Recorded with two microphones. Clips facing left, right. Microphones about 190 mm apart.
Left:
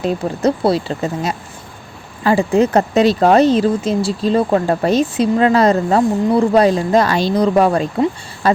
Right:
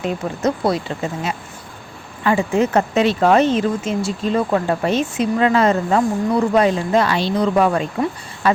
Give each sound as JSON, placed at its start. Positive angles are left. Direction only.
{"t": 0.0, "sound": "speech", "side_deg": 35}